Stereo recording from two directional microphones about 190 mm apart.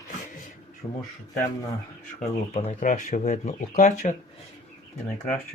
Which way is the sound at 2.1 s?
40° left (ahead or behind).